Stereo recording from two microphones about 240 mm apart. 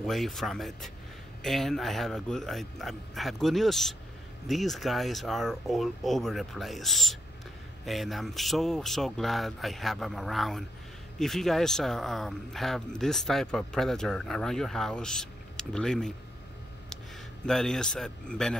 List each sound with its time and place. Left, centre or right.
0.0 s speech: centre
17.5 s speech: centre